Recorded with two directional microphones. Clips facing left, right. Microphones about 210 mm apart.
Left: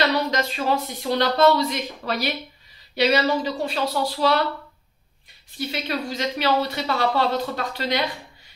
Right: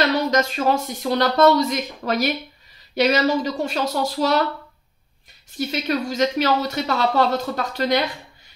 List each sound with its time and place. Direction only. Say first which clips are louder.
0.1 s speech: right 3 dB; 45° right (ahead or behind)
5.6 s speech: right 4 dB; 45° right (ahead or behind)